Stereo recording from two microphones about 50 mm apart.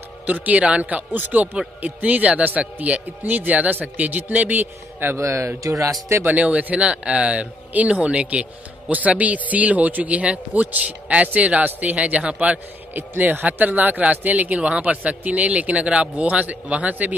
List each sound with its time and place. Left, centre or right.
0.3 s a man's voice: right
5.1 s speech: right
5.6 s speech: right
6.2 s speech: right
12.9 s speech: right